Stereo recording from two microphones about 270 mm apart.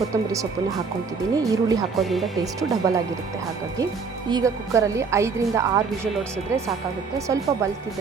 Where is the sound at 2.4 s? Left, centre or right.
Centre.